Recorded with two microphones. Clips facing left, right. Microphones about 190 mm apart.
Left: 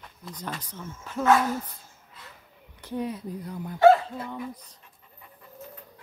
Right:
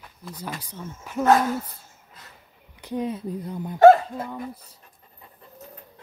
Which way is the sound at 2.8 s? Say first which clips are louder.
Right 3 dB; 15° right (ahead or behind).